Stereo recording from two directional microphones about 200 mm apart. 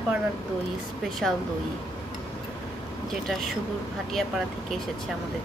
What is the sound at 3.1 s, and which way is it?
Speech, centre (ahead or behind).